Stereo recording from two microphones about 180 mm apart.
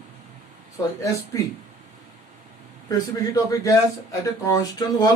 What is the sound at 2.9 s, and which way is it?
Speech, 20° left (ahead or behind).